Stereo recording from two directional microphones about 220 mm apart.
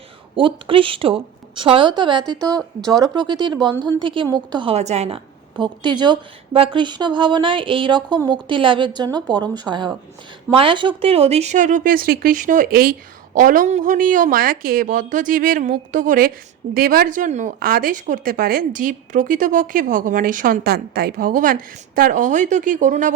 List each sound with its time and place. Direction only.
0.3 s speech: 25° right (ahead or behind)
2.6 s speech: centre (ahead or behind)
3.0 s speech: 20° right (ahead or behind); by 23.1 s 35° right (ahead or behind)